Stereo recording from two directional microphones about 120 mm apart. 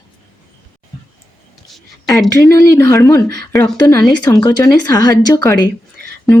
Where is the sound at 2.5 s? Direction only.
25° left (ahead or behind).